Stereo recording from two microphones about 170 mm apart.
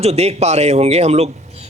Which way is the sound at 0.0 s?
40° right (ahead or behind).